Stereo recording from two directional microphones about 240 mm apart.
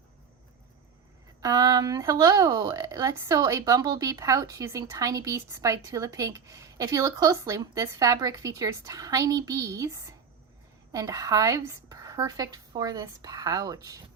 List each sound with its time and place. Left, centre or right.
1.4 s speech: centre